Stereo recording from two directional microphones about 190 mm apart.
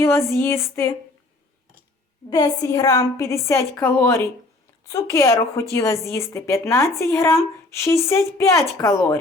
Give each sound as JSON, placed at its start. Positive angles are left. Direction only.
{"t": 0.0, "sound": "a woman's voice", "side_deg": 15}
{"t": 2.3, "sound": "a woman's voice", "side_deg": 20}